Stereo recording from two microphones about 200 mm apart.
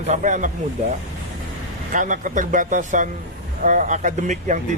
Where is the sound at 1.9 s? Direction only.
40° right (ahead or behind).